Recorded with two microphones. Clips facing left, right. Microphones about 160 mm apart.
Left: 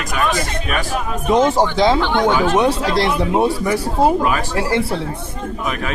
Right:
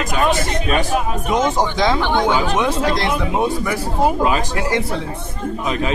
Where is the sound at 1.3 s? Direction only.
30° left (ahead or behind).